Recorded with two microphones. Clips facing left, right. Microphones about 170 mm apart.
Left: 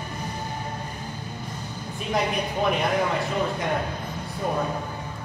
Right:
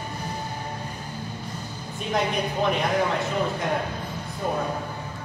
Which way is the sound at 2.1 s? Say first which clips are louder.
Even; 5° left (ahead or behind).